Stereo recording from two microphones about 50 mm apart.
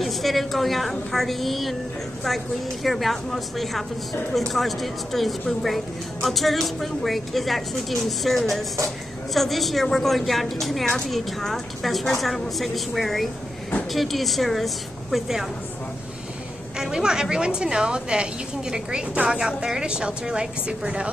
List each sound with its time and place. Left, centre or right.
0.0 s speech: centre
16.7 s a woman's voice: centre